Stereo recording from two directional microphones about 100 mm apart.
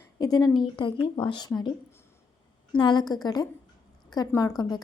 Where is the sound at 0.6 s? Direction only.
55° left (ahead or behind).